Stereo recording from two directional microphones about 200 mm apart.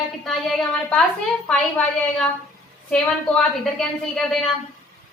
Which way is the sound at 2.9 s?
5° left (ahead or behind).